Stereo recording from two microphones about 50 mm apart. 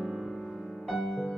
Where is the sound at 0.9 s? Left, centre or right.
Centre.